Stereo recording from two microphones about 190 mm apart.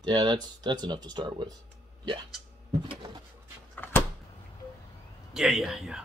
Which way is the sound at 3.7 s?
10° left (ahead or behind).